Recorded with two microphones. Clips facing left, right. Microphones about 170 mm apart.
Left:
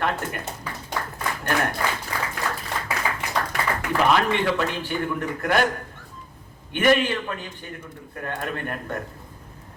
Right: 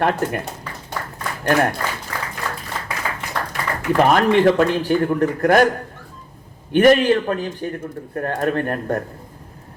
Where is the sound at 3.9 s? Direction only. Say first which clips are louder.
Right 6 dB; 45° right (ahead or behind).